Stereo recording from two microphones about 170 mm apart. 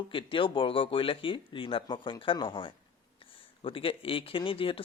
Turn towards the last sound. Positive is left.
turn(degrees=30)  # may be behind; listen again after turning